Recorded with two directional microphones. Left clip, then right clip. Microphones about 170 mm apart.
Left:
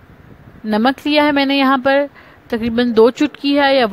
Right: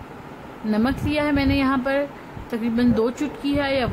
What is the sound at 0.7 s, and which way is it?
Speech, 50° left (ahead or behind).